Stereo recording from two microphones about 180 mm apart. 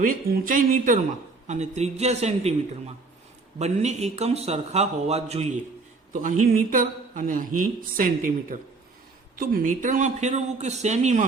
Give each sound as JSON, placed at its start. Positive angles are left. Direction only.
{"t": 0.0, "sound": "a man's voice", "side_deg": -50}
{"t": 6.2, "sound": "a man's voice", "side_deg": -50}